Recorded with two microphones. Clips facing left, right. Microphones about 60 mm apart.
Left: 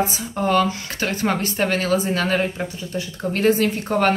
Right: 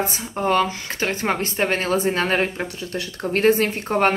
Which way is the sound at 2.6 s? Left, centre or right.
Right.